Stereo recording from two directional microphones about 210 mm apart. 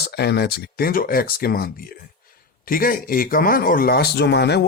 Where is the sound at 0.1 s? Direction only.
50° left (ahead or behind).